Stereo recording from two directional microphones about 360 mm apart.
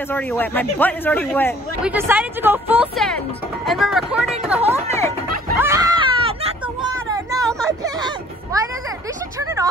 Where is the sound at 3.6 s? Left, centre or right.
Centre.